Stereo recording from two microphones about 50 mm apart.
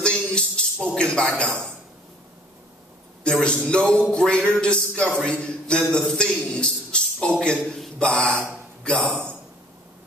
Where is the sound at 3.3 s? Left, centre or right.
Centre.